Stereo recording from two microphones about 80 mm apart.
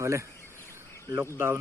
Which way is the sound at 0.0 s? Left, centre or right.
Right.